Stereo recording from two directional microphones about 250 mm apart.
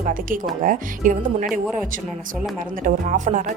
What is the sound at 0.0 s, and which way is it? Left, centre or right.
Speech, right.